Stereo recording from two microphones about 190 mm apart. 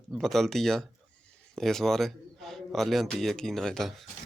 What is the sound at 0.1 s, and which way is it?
A man's voice, centre (ahead or behind).